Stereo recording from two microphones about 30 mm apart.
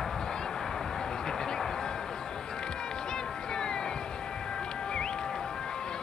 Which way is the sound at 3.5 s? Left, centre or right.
Left.